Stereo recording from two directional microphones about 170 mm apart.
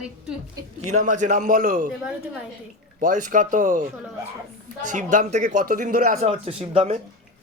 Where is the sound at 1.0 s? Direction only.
45° right (ahead or behind).